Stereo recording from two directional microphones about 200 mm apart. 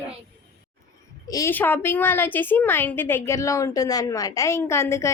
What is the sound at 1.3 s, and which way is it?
A woman's voice, 15° left (ahead or behind).